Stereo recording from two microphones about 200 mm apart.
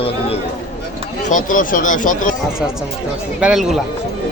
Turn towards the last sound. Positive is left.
turn(degrees=0)  # may be behind; listen again after turning